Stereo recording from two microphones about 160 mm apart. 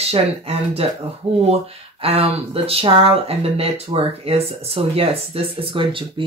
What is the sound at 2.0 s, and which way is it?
Speech, 40° right (ahead or behind).